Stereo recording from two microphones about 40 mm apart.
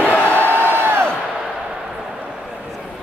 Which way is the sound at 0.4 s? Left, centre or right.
Right.